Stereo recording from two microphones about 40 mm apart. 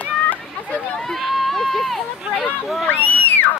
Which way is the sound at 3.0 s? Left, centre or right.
Left.